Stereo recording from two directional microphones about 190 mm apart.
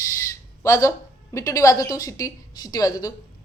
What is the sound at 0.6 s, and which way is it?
A woman's voice, 15° left (ahead or behind).